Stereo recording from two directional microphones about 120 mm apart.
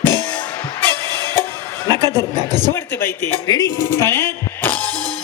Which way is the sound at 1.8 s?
35° right (ahead or behind).